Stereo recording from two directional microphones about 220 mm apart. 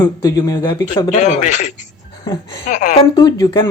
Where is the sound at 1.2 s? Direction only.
35° left (ahead or behind).